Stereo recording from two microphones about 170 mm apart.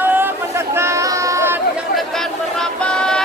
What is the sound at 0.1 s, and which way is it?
Chatter, 15° right (ahead or behind).